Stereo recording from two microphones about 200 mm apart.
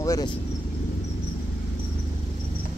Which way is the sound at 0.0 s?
15° left (ahead or behind).